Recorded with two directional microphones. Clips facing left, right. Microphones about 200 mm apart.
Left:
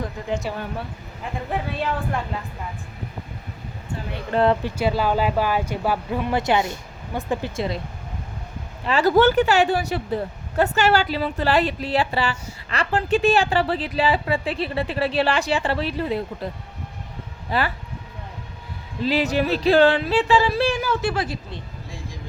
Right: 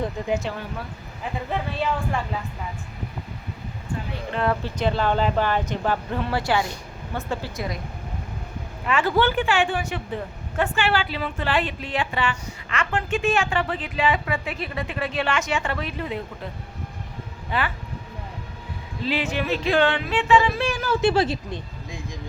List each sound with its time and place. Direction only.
0.2 s speech: 20° right (ahead or behind)
1.2 s speech: centre (ahead or behind)
4.6 s speech: 10° left (ahead or behind); by 7.8 s 25° left (ahead or behind)
8.9 s a woman's voice: 40° left (ahead or behind)
17.5 s a woman's voice: 35° left (ahead or behind)
19.0 s a woman's voice: 40° left (ahead or behind)
21.0 s speech: 25° right (ahead or behind)